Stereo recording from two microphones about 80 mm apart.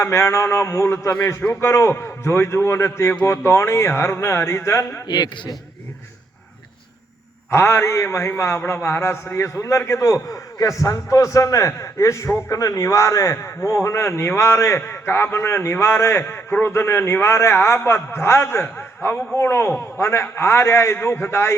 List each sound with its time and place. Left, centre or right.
0.0 s a man's voice: left
5.0 s a man's voice: left
7.5 s a man's voice: left